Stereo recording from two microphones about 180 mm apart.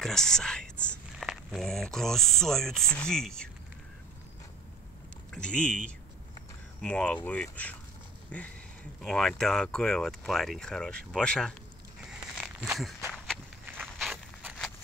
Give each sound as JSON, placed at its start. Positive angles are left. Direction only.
{"t": 0.0, "sound": "speech", "side_deg": 5}
{"t": 5.3, "sound": "speech", "side_deg": 5}
{"t": 6.8, "sound": "speech", "side_deg": 5}
{"t": 12.0, "sound": "a sound", "side_deg": 0}
{"t": 13.9, "sound": "walk", "side_deg": 0}